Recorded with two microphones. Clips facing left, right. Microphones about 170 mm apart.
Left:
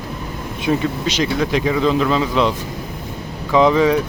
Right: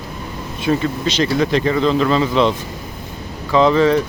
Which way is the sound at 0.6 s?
10° left (ahead or behind).